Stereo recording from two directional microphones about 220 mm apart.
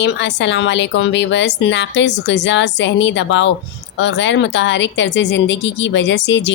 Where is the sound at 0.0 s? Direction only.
55° left (ahead or behind).